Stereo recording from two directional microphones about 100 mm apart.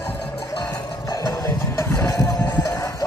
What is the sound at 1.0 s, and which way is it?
Music, 30° left (ahead or behind).